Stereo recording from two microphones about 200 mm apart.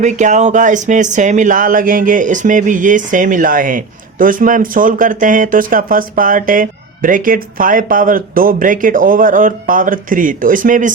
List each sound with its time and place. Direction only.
0.0 s speech: 35° right (ahead or behind)